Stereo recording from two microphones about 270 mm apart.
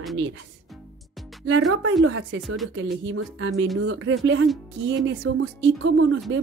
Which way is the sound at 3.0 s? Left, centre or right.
Right.